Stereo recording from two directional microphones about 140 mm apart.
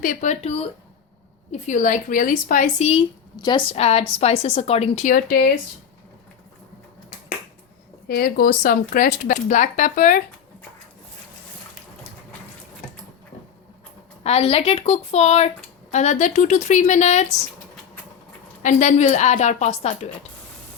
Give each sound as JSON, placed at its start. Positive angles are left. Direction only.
{"t": 0.0, "sound": "speech", "side_deg": 70}
{"t": 1.5, "sound": "a woman's voice", "side_deg": 60}
{"t": 3.3, "sound": "a woman's voice", "side_deg": 35}
{"t": 3.8, "sound": "a woman's voice", "side_deg": 45}
{"t": 8.0, "sound": "speech", "side_deg": 90}
{"t": 14.3, "sound": "a woman's voice", "side_deg": 45}
{"t": 18.6, "sound": "speech", "side_deg": 60}